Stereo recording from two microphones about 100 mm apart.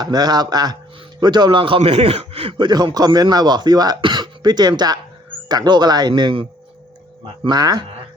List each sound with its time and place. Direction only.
0.0 s a man's voice: 45° right (ahead or behind); by 2.6 s 75° right (ahead or behind)
2.6 s speech: 45° right (ahead or behind)
7.4 s speech: 45° right (ahead or behind)